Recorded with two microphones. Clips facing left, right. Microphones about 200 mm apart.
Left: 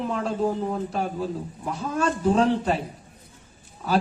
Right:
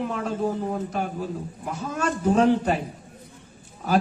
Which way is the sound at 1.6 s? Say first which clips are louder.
Left 2 dB; 35° left (ahead or behind).